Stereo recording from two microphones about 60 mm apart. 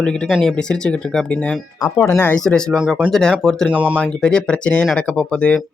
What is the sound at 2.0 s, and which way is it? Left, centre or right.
Speech, left.